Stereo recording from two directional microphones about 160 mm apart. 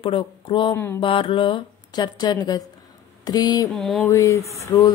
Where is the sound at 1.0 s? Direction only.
35° left (ahead or behind).